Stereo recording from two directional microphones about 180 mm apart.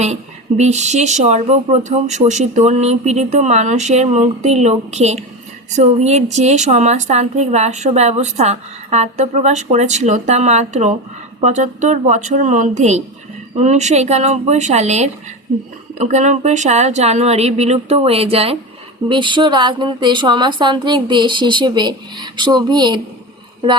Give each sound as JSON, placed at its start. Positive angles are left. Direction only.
{"t": 0.0, "sound": "speech", "side_deg": -40}